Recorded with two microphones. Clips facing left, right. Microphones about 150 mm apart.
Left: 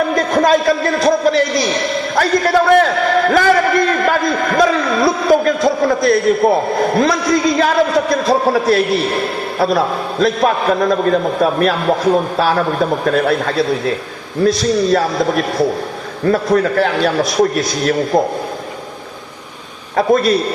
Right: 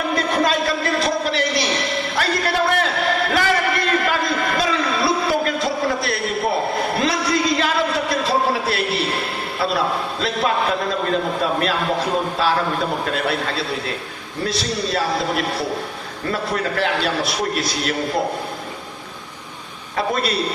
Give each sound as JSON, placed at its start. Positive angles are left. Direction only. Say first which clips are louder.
{"t": 0.1, "sound": "a man's voice", "louder": "left 7 dB", "side_deg": 40}
{"t": 2.1, "sound": "a sound", "louder": "left 8 dB", "side_deg": 40}
{"t": 5.6, "sound": "a man's voice", "louder": "left 8 dB", "side_deg": 40}
{"t": 20.0, "sound": "a man's voice", "louder": "left 9 dB", "side_deg": 40}